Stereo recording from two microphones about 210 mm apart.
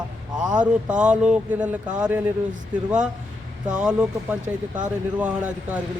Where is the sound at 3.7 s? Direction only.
5° right (ahead or behind).